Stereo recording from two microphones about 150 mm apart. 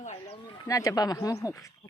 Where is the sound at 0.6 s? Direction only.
20° left (ahead or behind).